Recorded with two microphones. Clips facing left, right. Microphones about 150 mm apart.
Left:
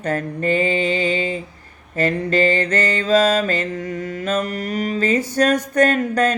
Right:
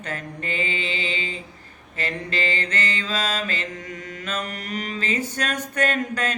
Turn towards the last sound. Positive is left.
turn(degrees=40)  # may be behind; listen again after turning